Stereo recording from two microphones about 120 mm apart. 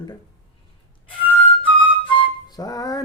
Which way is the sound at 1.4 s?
10° left (ahead or behind).